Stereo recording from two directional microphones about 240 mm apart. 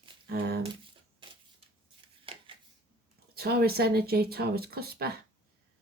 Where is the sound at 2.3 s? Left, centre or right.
Right.